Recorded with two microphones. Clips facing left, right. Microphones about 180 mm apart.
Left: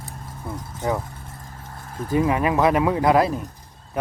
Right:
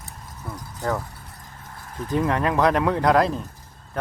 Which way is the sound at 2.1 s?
5° left (ahead or behind).